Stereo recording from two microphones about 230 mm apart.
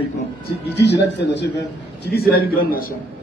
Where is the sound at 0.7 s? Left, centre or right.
Left.